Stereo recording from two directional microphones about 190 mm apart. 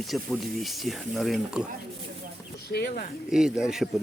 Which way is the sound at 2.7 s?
55° left (ahead or behind).